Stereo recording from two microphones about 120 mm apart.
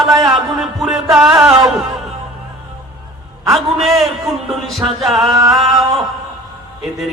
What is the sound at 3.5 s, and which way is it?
Speech, centre (ahead or behind).